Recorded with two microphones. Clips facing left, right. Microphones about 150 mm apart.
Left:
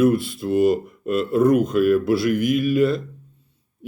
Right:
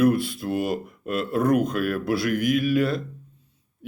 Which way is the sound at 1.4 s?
55° right (ahead or behind).